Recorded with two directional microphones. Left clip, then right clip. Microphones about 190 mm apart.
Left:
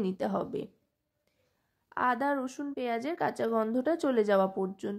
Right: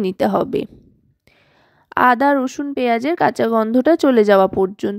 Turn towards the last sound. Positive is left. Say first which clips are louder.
# right 15 dB
turn(degrees=-45)  # may be behind; listen again after turning